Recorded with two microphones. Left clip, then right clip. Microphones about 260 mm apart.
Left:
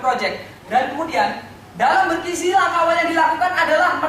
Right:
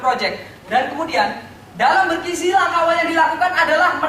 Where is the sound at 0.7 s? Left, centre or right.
Centre.